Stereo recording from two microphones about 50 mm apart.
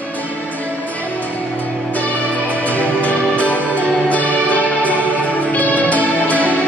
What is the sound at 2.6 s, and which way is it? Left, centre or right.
Music, left.